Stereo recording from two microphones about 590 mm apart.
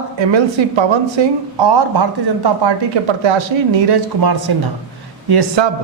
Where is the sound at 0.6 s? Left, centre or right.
Right.